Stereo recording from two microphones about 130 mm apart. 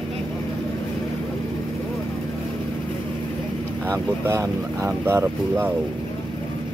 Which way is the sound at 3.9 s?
20° right (ahead or behind).